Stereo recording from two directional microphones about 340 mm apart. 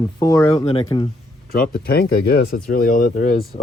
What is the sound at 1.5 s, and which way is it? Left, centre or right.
Speech, left.